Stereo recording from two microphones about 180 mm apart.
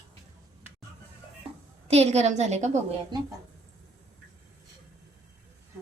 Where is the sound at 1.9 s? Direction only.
35° right (ahead or behind).